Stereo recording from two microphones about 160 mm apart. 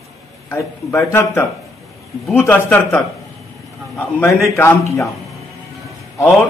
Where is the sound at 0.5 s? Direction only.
15° left (ahead or behind).